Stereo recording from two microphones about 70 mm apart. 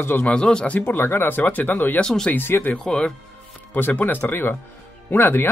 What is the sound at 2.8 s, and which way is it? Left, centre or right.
Speech, centre.